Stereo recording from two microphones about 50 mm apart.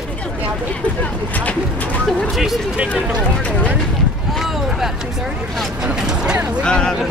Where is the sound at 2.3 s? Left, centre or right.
Centre.